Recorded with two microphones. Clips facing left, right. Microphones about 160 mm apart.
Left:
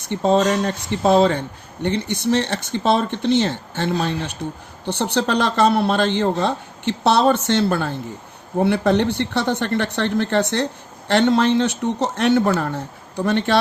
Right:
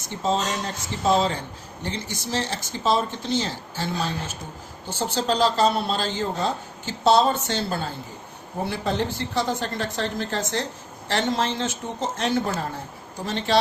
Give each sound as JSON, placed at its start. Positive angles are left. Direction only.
{"t": 0.0, "sound": "speech", "side_deg": 60}